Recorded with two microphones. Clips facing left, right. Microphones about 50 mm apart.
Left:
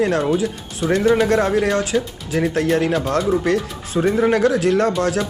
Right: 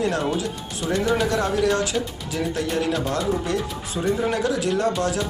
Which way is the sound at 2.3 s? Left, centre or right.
Left.